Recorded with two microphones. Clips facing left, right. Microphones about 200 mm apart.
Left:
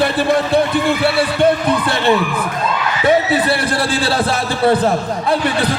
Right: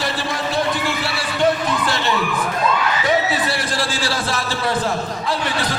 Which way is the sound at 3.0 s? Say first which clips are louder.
Left 9 dB; 60° left (ahead or behind).